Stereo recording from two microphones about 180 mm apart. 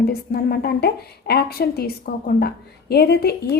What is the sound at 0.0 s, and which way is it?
A woman's voice, 60° left (ahead or behind).